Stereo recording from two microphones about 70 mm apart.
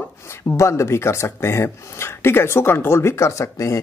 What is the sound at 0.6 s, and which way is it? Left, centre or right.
Speech, left.